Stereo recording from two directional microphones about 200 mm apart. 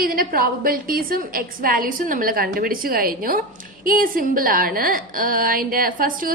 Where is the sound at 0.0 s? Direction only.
45° right (ahead or behind).